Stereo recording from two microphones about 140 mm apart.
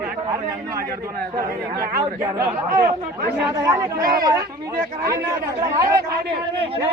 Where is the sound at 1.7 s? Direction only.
25° right (ahead or behind).